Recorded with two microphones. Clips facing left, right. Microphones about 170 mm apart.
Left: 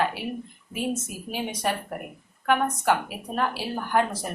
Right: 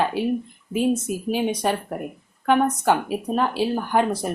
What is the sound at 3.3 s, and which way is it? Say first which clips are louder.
Speech: right 4 dB; 20° right (ahead or behind).